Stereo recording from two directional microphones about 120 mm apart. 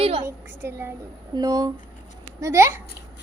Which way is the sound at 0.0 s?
50° right (ahead or behind).